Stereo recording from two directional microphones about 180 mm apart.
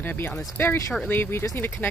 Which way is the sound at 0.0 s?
10° left (ahead or behind).